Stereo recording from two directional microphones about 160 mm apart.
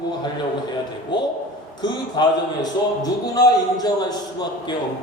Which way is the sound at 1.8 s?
25° left (ahead or behind).